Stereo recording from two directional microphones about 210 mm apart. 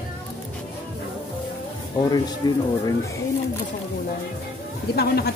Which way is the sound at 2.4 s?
20° left (ahead or behind).